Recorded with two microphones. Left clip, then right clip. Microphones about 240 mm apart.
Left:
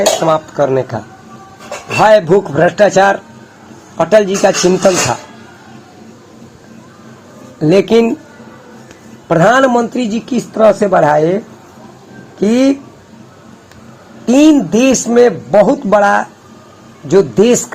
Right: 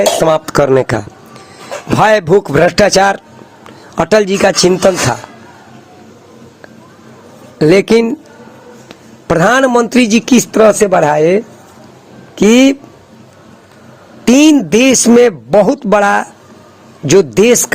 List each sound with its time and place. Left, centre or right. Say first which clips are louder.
0.0 s speech: right 1 dB; right
7.9 s speech: even; right
9.2 s speech: left 1 dB; right
12.5 s speech: right 4 dB; right
14.3 s speech: right 1 dB; right
16.0 s speech: left 1 dB; right
17.1 s speech: right 2 dB; right